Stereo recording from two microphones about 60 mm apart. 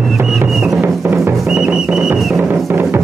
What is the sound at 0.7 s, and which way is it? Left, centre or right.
Music, right.